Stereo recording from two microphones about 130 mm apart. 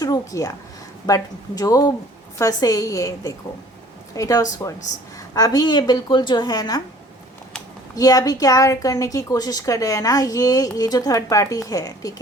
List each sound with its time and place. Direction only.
0.0 s a woman's voice: 25° left (ahead or behind)
7.9 s a woman's voice: 25° left (ahead or behind)